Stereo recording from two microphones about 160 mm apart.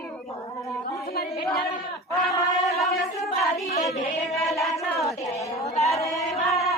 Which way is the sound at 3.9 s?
Centre (ahead or behind).